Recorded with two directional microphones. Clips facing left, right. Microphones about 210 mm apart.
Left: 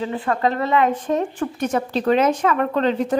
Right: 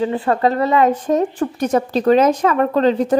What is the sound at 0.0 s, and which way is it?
A woman's voice, 40° right (ahead or behind).